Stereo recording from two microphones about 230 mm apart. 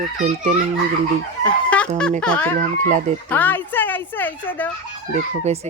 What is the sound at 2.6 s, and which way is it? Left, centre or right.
Speech, right.